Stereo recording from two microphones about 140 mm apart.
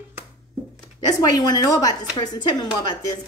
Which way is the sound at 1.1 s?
30° left (ahead or behind).